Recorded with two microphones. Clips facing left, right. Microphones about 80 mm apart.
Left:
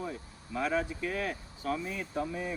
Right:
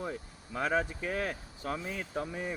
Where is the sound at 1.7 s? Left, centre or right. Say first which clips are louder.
Left 2 dB; right.